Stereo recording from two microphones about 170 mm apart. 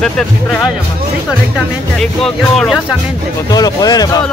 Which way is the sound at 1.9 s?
5° left (ahead or behind).